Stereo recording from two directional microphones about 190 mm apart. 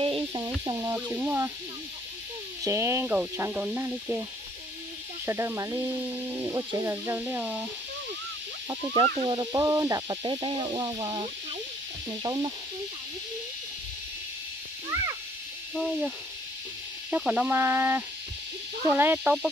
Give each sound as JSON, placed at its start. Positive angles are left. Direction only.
{"t": 0.0, "sound": "a sound", "side_deg": -30}
{"t": 0.7, "sound": "speech", "side_deg": -15}
{"t": 2.6, "sound": "speech", "side_deg": -15}
{"t": 8.6, "sound": "speech", "side_deg": -20}
{"t": 15.7, "sound": "owl", "side_deg": 5}
{"t": 17.1, "sound": "speech", "side_deg": -5}